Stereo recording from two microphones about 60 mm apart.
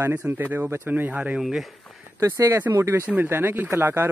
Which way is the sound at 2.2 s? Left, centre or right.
Right.